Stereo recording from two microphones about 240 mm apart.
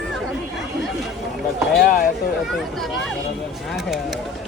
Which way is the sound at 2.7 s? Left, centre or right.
Centre.